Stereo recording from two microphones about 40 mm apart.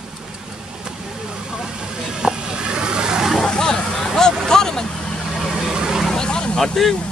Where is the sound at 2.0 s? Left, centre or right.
Centre.